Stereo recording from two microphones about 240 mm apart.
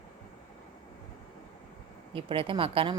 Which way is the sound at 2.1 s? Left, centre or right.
Right.